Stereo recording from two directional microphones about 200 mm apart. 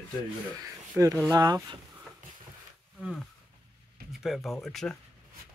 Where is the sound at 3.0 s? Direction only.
Centre (ahead or behind).